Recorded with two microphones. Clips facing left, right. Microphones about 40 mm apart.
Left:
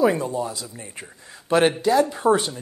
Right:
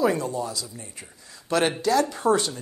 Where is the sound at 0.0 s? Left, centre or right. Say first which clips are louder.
Left 3 dB; centre.